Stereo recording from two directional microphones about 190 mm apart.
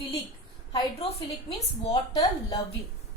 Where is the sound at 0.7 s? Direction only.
25° left (ahead or behind).